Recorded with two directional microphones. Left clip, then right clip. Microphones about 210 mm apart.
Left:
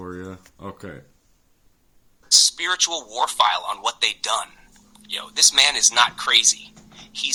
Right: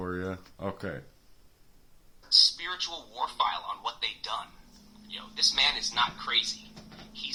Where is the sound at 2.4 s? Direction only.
55° left (ahead or behind).